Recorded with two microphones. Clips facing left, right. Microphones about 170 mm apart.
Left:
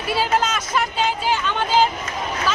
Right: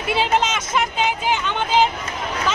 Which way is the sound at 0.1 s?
20° right (ahead or behind).